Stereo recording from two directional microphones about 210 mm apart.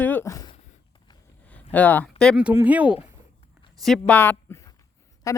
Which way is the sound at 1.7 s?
10° left (ahead or behind).